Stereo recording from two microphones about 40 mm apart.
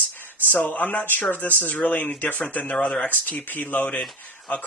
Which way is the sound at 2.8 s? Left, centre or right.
Left.